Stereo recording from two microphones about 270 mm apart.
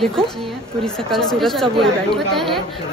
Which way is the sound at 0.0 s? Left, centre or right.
Centre.